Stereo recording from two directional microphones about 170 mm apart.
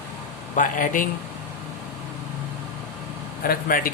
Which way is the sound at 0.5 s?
50° left (ahead or behind).